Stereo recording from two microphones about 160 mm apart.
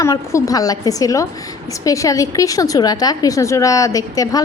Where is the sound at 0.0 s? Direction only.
20° left (ahead or behind).